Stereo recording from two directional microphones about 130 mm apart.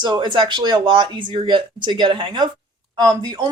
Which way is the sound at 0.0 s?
35° right (ahead or behind).